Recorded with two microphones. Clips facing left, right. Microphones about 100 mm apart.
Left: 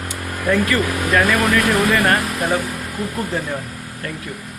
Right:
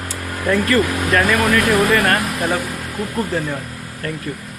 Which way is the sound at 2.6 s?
15° right (ahead or behind).